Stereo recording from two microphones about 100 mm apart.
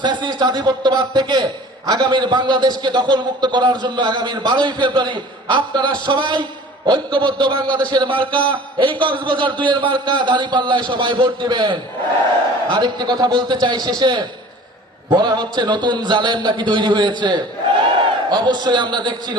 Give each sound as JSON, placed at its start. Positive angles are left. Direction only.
{"t": 0.0, "sound": "a man's voice", "side_deg": -50}